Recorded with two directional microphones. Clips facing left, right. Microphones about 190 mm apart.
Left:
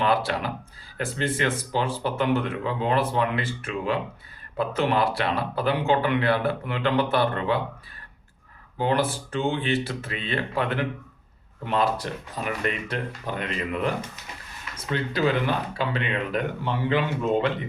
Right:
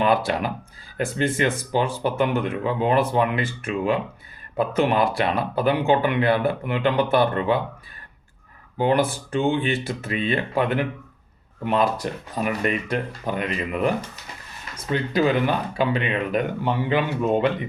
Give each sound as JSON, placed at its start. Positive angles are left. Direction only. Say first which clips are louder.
{"t": 0.0, "sound": "speech", "louder": "right 3 dB", "side_deg": -15}
{"t": 8.8, "sound": "speech", "louder": "right 4 dB", "side_deg": -15}